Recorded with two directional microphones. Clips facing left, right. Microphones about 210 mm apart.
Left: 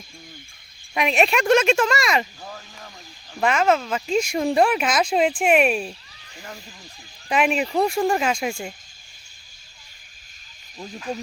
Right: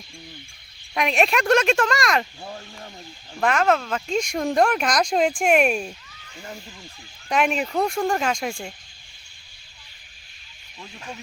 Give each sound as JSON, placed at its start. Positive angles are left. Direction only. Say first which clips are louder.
{"t": 0.9, "sound": "speech", "louder": "left 1 dB", "side_deg": 0}
{"t": 3.4, "sound": "speech", "louder": "left 1 dB", "side_deg": 0}
{"t": 7.3, "sound": "speech", "louder": "left 1 dB", "side_deg": 5}
{"t": 11.1, "sound": "speech", "louder": "left 9 dB", "side_deg": 40}